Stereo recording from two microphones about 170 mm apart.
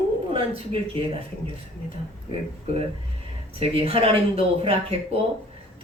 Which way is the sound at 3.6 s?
35° right (ahead or behind).